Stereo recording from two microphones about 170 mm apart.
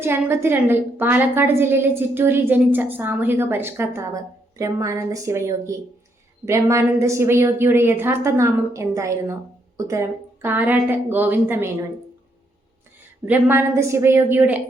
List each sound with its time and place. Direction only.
0.0 s a woman's voice: 15° right (ahead or behind)
13.2 s a woman's voice: 10° right (ahead or behind)